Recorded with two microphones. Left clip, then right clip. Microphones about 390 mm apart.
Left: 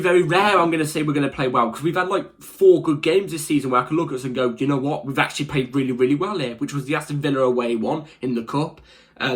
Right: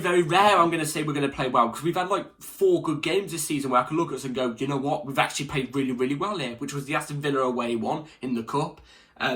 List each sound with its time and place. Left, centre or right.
0.0 s speech: centre